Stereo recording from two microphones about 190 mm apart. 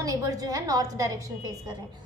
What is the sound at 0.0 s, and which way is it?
A child's voice, 20° right (ahead or behind).